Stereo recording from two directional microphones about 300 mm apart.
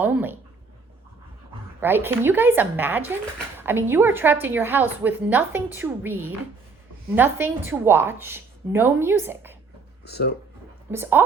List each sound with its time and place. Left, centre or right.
0.0 s speech: centre
1.8 s a woman's voice: centre
10.1 s speech: left
10.9 s a woman's voice: centre